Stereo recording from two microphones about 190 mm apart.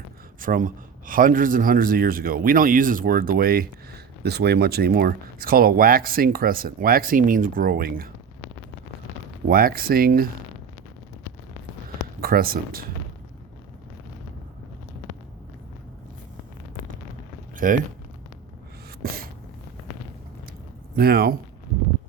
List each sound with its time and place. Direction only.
0.3 s a man's voice: 45° right (ahead or behind)
9.5 s a man's voice: 50° right (ahead or behind)
12.2 s a man's voice: 50° right (ahead or behind)
17.6 s a man's voice: 45° right (ahead or behind)
19.0 s a sound: 50° right (ahead or behind)
20.9 s a man's voice: 55° right (ahead or behind)